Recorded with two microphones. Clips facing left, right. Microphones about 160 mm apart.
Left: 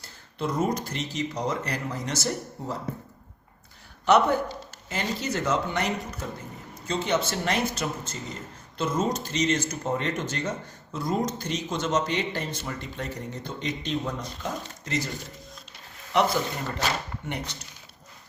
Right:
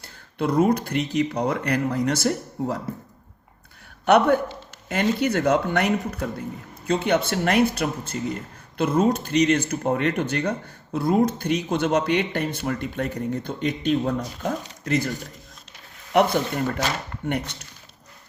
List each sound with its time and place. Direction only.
0.0 s speech: 60° right (ahead or behind)
4.0 s speech: 60° right (ahead or behind)
16.1 s speech: 55° right (ahead or behind)